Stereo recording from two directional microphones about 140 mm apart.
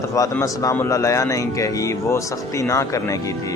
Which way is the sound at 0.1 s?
20° left (ahead or behind).